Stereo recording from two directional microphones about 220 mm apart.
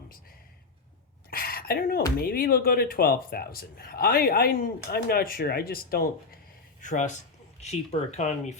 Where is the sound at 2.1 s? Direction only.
45° left (ahead or behind).